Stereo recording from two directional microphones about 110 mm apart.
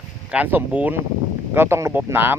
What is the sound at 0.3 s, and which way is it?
Speech, 15° right (ahead or behind).